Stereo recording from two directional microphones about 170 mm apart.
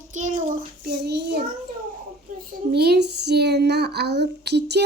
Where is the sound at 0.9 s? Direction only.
75° right (ahead or behind).